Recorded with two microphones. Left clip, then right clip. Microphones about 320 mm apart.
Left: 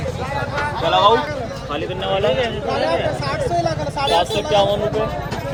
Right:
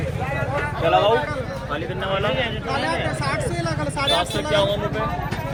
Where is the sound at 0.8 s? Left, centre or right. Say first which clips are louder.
Left 3 dB; left.